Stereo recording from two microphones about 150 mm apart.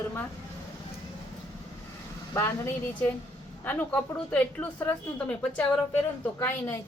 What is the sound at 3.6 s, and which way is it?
Speech, 10° left (ahead or behind).